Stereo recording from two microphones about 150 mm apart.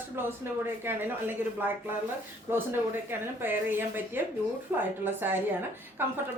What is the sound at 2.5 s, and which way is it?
A woman's voice, 15° right (ahead or behind).